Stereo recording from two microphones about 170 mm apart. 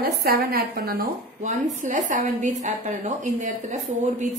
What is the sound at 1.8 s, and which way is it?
A woman's voice, 50° right (ahead or behind).